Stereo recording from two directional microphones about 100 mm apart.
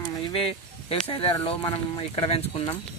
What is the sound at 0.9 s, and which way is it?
Speech, 70° left (ahead or behind).